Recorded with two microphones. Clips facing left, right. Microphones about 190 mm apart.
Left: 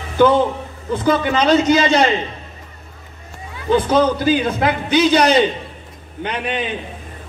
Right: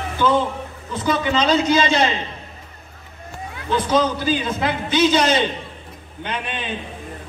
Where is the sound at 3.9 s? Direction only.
55° left (ahead or behind).